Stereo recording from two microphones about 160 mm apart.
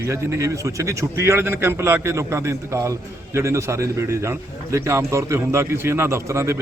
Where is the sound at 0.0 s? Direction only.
15° right (ahead or behind).